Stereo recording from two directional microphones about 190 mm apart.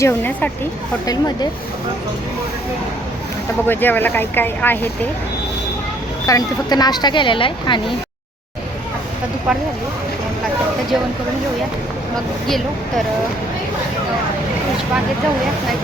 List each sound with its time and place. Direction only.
0.0 s speech: 10° left (ahead or behind)
1.0 s speech: 20° left (ahead or behind)
3.7 s speech: 10° left (ahead or behind)
6.2 s speech: 20° left (ahead or behind)